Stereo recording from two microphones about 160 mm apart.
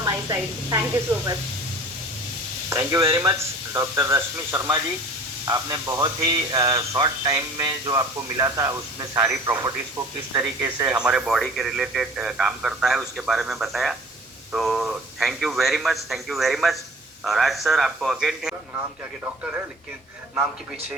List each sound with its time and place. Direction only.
0.0 s speech: 20° right (ahead or behind)
2.6 s speech: 20° right (ahead or behind)
11.0 s speech: 5° right (ahead or behind)